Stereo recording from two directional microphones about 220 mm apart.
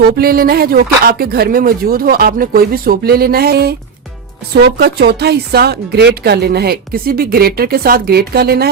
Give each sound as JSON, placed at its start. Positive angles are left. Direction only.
{"t": 0.0, "sound": "speech", "side_deg": -45}